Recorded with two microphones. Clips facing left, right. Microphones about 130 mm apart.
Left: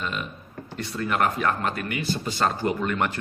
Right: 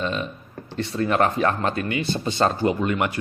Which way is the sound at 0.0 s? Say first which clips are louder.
Right 5 dB; 30° right (ahead or behind).